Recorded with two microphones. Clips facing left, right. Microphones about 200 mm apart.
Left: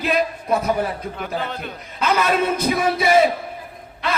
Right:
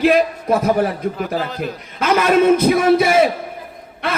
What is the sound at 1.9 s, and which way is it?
A man's voice, 50° right (ahead or behind).